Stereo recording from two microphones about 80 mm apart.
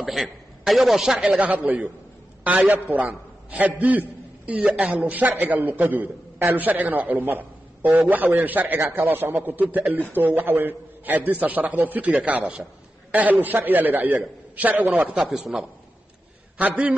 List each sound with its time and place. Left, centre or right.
0.0 s a man's voice: centre
1.4 s a man's voice: centre
15.3 s speech: centre
16.5 s a man's voice: centre